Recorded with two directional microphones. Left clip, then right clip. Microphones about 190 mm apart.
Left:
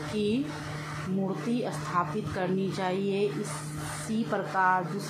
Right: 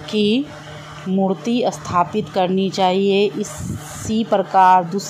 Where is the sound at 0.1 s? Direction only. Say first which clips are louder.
Right 12 dB; 65° right (ahead or behind).